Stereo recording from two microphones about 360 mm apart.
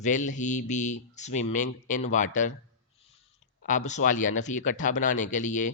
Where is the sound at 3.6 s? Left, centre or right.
Left.